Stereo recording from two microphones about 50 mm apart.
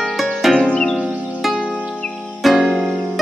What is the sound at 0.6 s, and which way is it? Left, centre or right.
Music, left.